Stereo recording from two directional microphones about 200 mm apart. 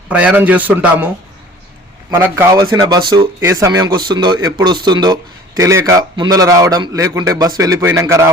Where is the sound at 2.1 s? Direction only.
15° right (ahead or behind).